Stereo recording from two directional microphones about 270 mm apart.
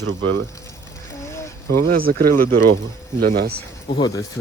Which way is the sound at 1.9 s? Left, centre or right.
Right.